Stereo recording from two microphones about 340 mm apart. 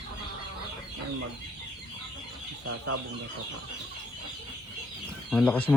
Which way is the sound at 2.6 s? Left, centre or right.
Right.